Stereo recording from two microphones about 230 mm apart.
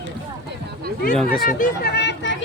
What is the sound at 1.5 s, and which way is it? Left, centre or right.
Speech, left.